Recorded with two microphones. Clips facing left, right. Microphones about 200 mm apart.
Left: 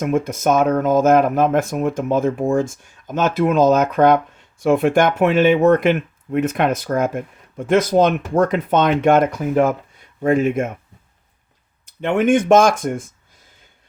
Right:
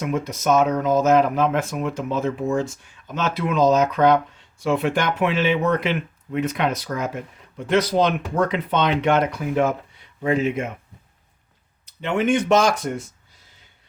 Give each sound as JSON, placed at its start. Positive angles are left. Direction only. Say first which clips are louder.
{"t": 0.0, "sound": "speech", "louder": "left 5 dB", "side_deg": 50}
{"t": 11.9, "sound": "speech", "louder": "left 5 dB", "side_deg": 50}